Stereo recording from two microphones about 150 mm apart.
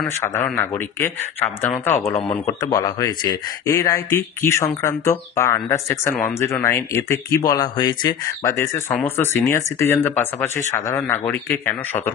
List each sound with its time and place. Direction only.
0.2 s speech: 15° left (ahead or behind)
8.5 s speech: 15° left (ahead or behind)